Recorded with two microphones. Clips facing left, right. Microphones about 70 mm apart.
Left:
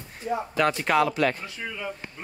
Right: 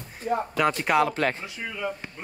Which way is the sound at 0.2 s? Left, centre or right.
Right.